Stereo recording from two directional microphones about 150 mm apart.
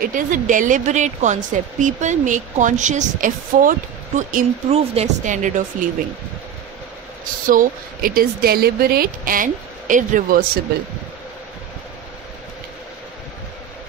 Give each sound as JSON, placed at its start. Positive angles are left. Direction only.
{"t": 0.0, "sound": "speech", "side_deg": -65}
{"t": 4.6, "sound": "speech", "side_deg": -45}
{"t": 7.4, "sound": "speech", "side_deg": -70}